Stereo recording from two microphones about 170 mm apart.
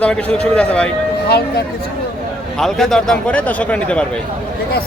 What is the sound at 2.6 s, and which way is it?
A man's voice, centre (ahead or behind).